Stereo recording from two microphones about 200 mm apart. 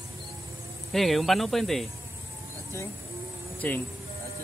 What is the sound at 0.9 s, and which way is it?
Speech, centre (ahead or behind).